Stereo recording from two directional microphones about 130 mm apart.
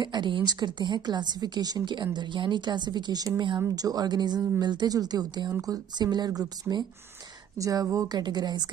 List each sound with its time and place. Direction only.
0.0 s a woman's voice: 35° right (ahead or behind)